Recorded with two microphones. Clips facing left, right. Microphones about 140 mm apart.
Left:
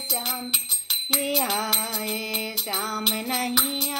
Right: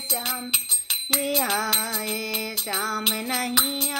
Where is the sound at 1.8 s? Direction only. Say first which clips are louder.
Even; 30° left (ahead or behind).